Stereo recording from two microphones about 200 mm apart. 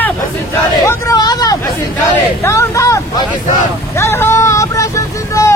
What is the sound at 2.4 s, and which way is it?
Vehicle, 15° left (ahead or behind).